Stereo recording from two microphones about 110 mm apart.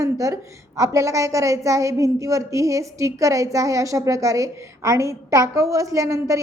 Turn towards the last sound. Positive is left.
turn(degrees=-30)  # may be behind; listen again after turning